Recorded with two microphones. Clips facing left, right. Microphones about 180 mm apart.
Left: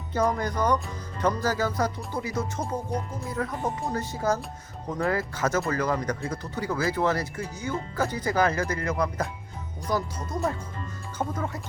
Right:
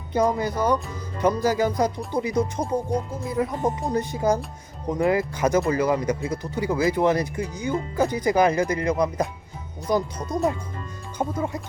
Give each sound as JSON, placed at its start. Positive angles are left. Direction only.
{"t": 0.1, "sound": "speech", "side_deg": -10}